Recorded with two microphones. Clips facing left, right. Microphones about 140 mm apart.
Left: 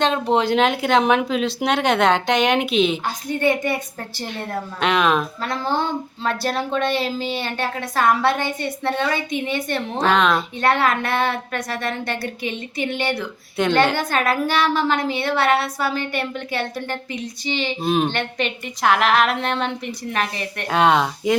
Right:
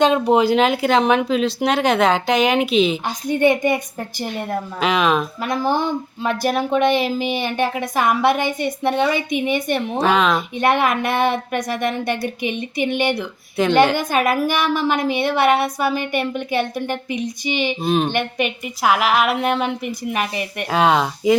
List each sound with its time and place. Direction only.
0.0 s speech: 10° right (ahead or behind)
3.2 s a woman's voice: 20° right (ahead or behind)
4.8 s speech: centre (ahead or behind)
5.4 s speech: 15° right (ahead or behind)
10.6 s speech: 15° right (ahead or behind)
13.6 s speech: centre (ahead or behind)
13.9 s speech: 15° right (ahead or behind)
17.8 s speech: centre (ahead or behind)
18.1 s speech: 10° right (ahead or behind)
20.7 s speech: centre (ahead or behind)